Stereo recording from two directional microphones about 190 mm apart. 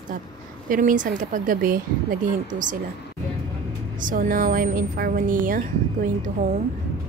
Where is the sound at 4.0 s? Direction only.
45° right (ahead or behind).